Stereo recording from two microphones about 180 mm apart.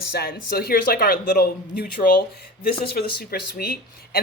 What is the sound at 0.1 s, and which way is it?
Speech, 60° left (ahead or behind).